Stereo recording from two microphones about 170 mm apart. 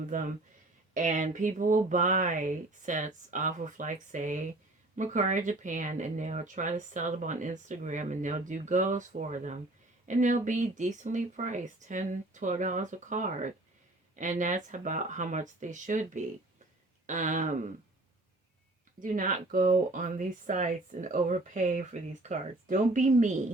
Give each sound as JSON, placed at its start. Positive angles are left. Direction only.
{"t": 0.1, "sound": "speech", "side_deg": -50}
{"t": 18.9, "sound": "speech", "side_deg": -50}